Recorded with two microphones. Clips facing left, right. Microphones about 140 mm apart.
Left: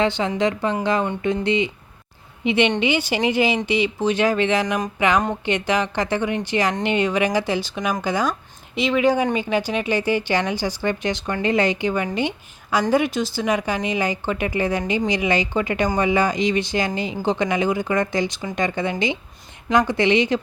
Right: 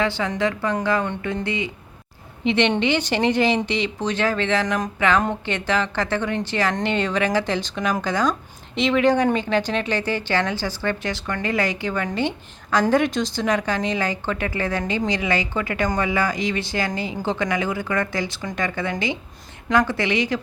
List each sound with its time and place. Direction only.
0.0 s a woman's voice: 20° left (ahead or behind)
2.4 s a woman's voice: 10° left (ahead or behind)
12.9 s a woman's voice: 5° left (ahead or behind); by 20.4 s 20° left (ahead or behind)